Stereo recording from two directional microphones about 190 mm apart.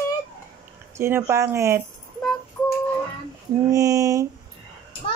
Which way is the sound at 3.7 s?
15° right (ahead or behind).